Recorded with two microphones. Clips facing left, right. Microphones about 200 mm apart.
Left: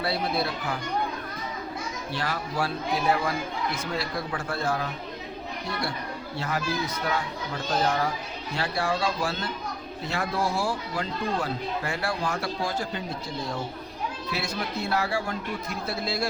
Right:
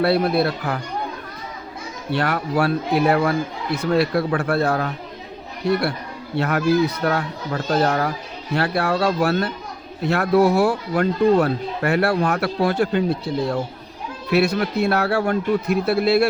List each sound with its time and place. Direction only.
0.0 s speech: 65° right (ahead or behind)
2.1 s speech: 65° right (ahead or behind)